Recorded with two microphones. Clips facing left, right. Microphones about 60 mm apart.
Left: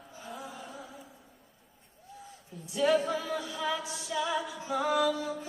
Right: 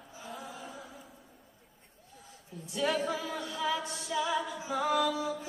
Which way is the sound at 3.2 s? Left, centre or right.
Centre.